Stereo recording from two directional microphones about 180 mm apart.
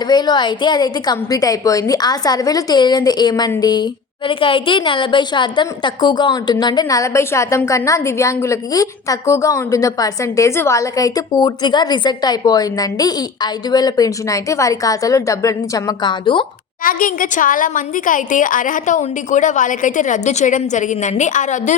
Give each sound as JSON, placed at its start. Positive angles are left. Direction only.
{"t": 0.1, "sound": "a woman's voice", "side_deg": 25}
{"t": 16.8, "sound": "a woman's voice", "side_deg": 50}